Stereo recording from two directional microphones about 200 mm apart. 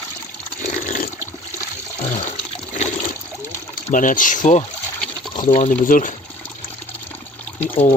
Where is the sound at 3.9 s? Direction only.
40° left (ahead or behind).